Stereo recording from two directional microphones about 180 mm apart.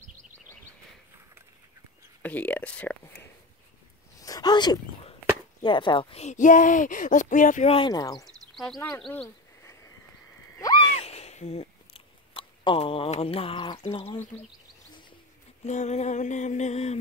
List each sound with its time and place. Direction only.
2.2 s speech: 10° left (ahead or behind)
4.2 s sneeze: 20° left (ahead or behind)
5.6 s speech: 25° left (ahead or behind); by 7.7 s 45° left (ahead or behind)
7.7 s speech: 25° left (ahead or behind)
9.0 s speech: 5° left (ahead or behind)
9.6 s a sound: 15° left (ahead or behind)
10.9 s cat: 35° left (ahead or behind)
14.9 s bird: 25° left (ahead or behind)
15.6 s a sound: 40° left (ahead or behind)